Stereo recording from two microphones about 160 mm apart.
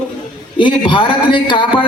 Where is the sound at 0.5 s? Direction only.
30° left (ahead or behind).